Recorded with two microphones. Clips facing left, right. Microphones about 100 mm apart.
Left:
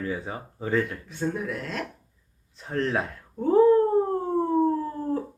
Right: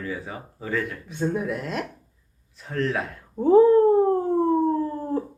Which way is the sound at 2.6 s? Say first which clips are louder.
Even; 30° left (ahead or behind).